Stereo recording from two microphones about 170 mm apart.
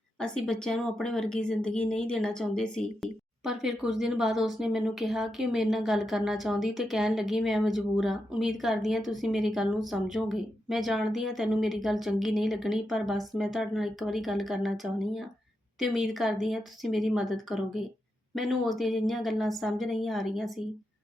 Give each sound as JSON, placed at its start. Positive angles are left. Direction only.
{"t": 0.2, "sound": "speech", "side_deg": 5}